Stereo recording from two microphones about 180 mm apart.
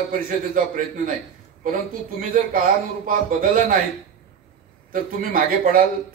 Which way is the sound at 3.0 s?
50° right (ahead or behind).